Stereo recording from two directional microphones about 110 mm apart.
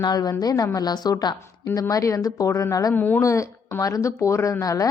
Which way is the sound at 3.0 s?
15° left (ahead or behind).